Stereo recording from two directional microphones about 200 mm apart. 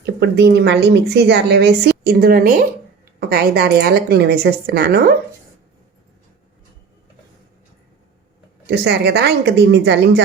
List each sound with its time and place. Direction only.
0.0 s a woman's voice: 55° right (ahead or behind)
8.6 s a woman's voice: 55° right (ahead or behind)